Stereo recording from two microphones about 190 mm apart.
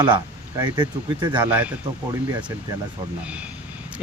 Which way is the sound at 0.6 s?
25° right (ahead or behind).